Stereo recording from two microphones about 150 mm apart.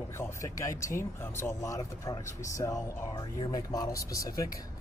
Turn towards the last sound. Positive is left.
turn(degrees=20)  # may be behind; listen again after turning